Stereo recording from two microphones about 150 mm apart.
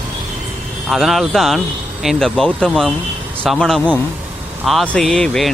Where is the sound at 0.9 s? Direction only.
Centre (ahead or behind).